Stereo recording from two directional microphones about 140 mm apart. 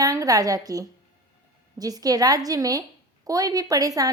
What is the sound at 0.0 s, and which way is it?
A woman's voice, 25° right (ahead or behind).